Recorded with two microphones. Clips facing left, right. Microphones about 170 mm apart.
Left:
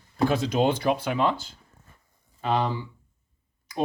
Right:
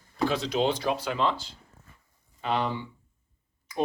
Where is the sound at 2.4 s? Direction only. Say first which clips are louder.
Left 3 dB; 40° left (ahead or behind).